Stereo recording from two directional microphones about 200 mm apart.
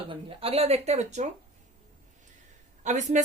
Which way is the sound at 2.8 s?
35° right (ahead or behind).